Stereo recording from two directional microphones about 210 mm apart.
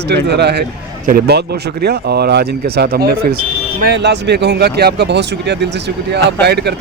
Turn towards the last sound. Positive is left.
turn(degrees=-50)  # may be behind; listen again after turning